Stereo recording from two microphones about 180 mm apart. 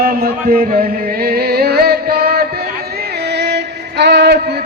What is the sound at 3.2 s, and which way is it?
Music, 70° right (ahead or behind).